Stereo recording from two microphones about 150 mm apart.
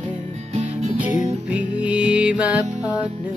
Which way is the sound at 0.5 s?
50° right (ahead or behind).